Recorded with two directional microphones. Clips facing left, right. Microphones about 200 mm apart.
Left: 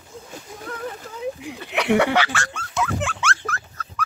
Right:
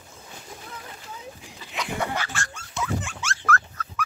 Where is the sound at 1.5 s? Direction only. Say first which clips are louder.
Left 12 dB; 65° left (ahead or behind).